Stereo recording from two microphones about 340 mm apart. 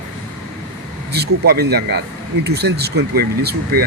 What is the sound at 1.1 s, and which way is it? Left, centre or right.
Speech, right.